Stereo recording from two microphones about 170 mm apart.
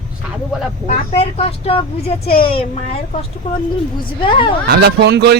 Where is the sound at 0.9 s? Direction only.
35° left (ahead or behind).